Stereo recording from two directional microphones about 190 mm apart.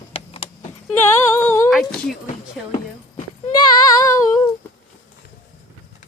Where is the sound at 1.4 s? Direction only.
15° left (ahead or behind).